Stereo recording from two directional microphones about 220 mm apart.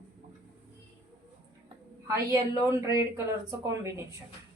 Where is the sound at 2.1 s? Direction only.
10° right (ahead or behind).